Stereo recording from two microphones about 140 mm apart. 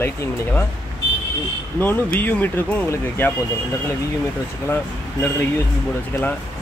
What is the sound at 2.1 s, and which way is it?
Speech, 15° left (ahead or behind).